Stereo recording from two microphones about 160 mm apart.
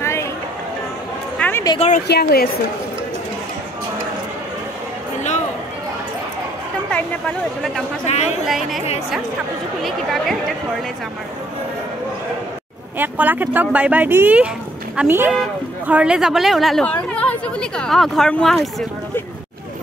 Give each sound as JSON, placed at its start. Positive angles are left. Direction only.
{"t": 0.0, "sound": "music", "side_deg": 15}
{"t": 1.4, "sound": "a sound", "side_deg": 20}
{"t": 2.0, "sound": "a woman's voice", "side_deg": 80}
{"t": 8.1, "sound": "speech", "side_deg": 45}
{"t": 8.5, "sound": "speech", "side_deg": 0}
{"t": 9.8, "sound": "speech", "side_deg": 0}
{"t": 12.9, "sound": "speech", "side_deg": -10}